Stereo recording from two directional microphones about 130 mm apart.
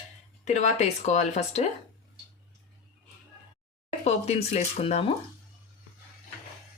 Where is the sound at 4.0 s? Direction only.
55° left (ahead or behind).